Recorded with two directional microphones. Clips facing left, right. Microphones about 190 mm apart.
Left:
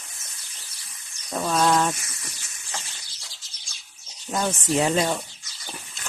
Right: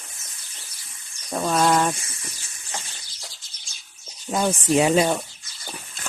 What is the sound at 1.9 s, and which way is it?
Snake, 30° right (ahead or behind).